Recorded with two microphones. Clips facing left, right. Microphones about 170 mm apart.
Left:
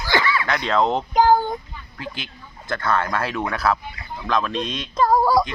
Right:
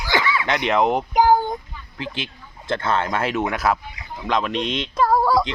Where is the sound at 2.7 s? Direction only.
25° right (ahead or behind).